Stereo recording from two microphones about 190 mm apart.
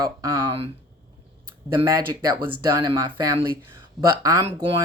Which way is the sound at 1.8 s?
20° right (ahead or behind).